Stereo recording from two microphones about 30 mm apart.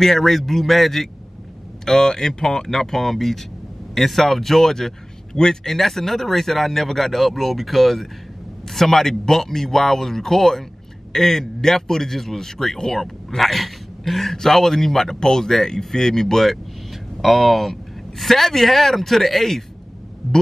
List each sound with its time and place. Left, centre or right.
0.2 s speech: centre
1.9 s a man's voice: centre
13.4 s dog: centre
14.3 s speech: centre
17.2 s a man's voice: centre